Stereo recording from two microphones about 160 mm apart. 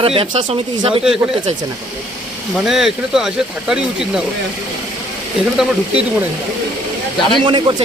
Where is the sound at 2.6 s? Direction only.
Centre (ahead or behind).